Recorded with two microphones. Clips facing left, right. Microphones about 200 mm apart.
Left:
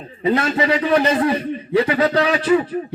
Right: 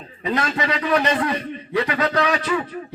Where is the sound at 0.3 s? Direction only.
30° left (ahead or behind).